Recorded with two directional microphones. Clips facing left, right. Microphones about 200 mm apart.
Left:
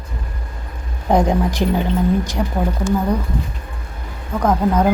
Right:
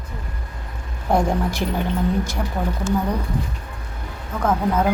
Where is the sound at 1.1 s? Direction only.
15° left (ahead or behind).